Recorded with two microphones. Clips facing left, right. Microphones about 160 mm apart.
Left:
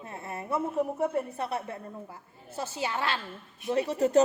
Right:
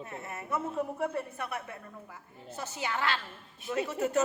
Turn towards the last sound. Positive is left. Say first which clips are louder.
# left 5 dB
turn(degrees=35)  # may be behind; listen again after turning